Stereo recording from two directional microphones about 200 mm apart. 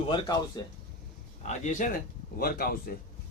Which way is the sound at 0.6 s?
20° left (ahead or behind).